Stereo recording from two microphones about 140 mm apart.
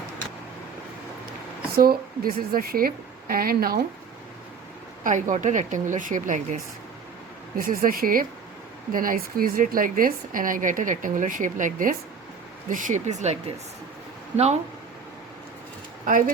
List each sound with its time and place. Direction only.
1.7 s a woman's voice: 90° right
5.0 s a woman's voice: 65° right (ahead or behind)
7.6 s a woman's voice: 90° right; by 13.3 s 55° right (ahead or behind)
16.0 s a woman's voice: 70° right (ahead or behind)